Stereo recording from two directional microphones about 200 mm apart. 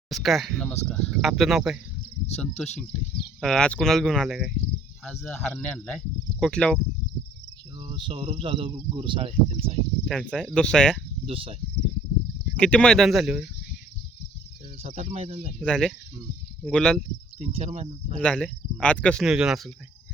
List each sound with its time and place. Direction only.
0.1 s speech: centre (ahead or behind)
7.8 s speech: 25° right (ahead or behind)
10.1 s speech: centre (ahead or behind)
11.3 s speech: 25° right (ahead or behind)
12.5 s speech: 5° left (ahead or behind)
14.8 s speech: 30° right (ahead or behind)
15.5 s speech: 5° left (ahead or behind)
17.4 s speech: 30° right (ahead or behind)
18.2 s speech: 5° left (ahead or behind)